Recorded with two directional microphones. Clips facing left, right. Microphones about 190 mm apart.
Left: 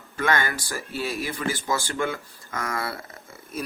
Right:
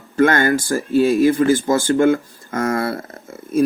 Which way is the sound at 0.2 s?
50° right (ahead or behind).